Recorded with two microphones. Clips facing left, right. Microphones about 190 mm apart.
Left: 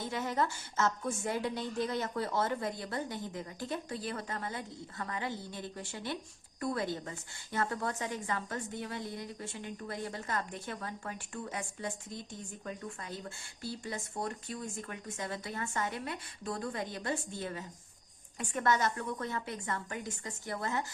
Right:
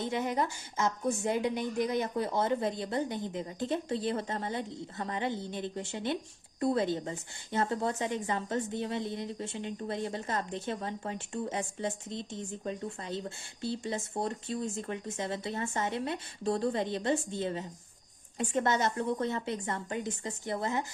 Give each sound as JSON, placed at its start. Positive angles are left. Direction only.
{"t": 0.0, "sound": "a woman's voice", "side_deg": -20}